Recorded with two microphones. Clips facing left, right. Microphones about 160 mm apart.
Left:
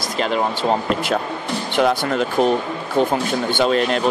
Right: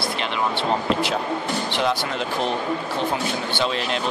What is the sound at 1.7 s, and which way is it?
Speech, 50° left (ahead or behind).